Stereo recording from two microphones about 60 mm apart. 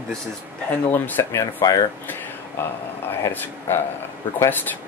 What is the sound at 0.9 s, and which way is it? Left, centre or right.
Speech, left.